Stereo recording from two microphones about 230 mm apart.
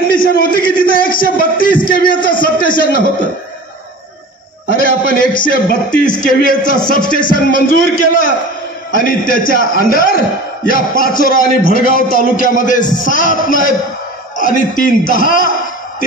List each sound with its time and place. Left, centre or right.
0.1 s music: left
1.9 s a man's voice: left
4.6 s a man's voice: left
8.9 s a man's voice: left